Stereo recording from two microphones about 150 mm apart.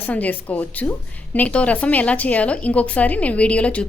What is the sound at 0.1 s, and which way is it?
A woman's voice, 10° left (ahead or behind).